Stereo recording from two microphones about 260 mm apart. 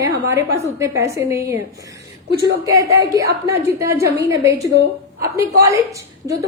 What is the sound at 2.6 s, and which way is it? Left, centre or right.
A woman's voice, centre.